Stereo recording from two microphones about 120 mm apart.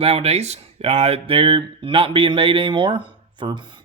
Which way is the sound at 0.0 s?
55° right (ahead or behind).